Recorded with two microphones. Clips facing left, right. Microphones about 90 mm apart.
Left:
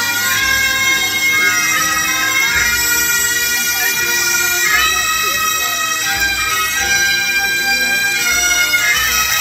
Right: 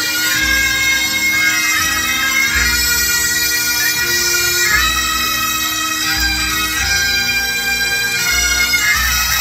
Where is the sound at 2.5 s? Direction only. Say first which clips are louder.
Left 1 dB; 10° right (ahead or behind).